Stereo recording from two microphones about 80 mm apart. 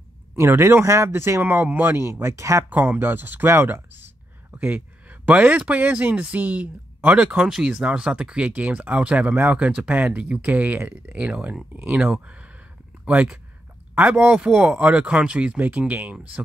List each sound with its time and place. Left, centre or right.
0.4 s speech: right
2.0 s speech: right
2.7 s speech: right
4.5 s a sound: centre
5.0 s speech: centre